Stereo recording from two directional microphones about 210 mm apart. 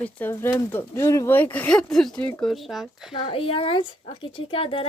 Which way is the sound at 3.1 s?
25° left (ahead or behind).